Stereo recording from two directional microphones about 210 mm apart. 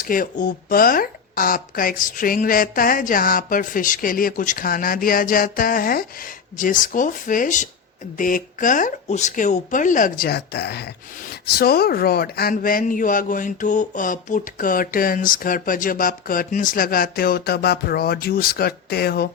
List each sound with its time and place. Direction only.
0.0 s a man's voice: 40° left (ahead or behind)